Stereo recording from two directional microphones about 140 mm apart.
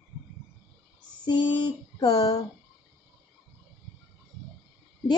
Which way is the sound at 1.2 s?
35° left (ahead or behind).